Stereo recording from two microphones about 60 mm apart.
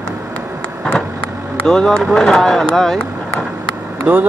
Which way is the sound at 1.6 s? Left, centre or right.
Centre.